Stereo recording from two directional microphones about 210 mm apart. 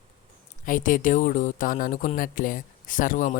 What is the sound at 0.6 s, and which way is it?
Speech, 40° left (ahead or behind).